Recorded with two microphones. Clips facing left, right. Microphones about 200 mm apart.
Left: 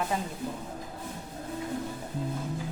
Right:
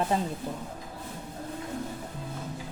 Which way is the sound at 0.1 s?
30° right (ahead or behind).